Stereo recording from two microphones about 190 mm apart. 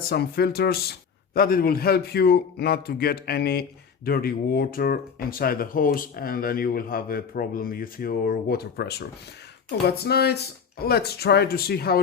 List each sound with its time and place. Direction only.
0.1 s a man's voice: 55° left (ahead or behind)